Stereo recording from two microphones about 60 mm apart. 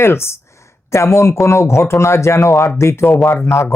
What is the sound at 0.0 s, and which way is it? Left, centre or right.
Speech, left.